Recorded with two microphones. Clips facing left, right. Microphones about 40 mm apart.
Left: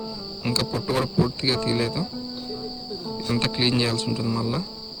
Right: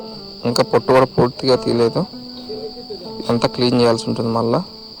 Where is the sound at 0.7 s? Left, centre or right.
Right.